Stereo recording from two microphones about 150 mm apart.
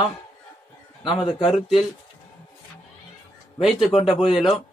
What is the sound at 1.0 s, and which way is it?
Speech, 35° left (ahead or behind).